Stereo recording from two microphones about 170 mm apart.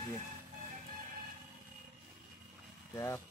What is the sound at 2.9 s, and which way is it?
Speech, 15° left (ahead or behind).